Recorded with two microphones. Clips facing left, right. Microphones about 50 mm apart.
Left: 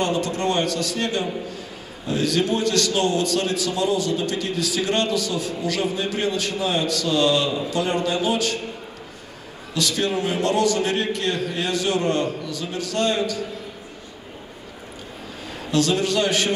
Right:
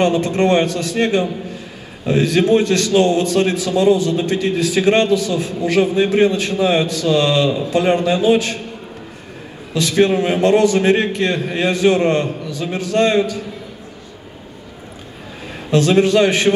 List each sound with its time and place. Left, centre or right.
0.0 s a man's voice: right
9.8 s a man's voice: right
16.0 s a man's voice: right